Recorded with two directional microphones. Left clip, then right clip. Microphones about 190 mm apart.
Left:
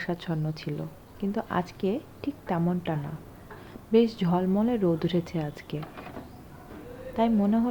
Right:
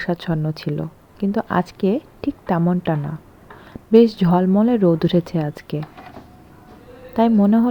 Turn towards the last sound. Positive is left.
turn(degrees=-40)  # may be behind; listen again after turning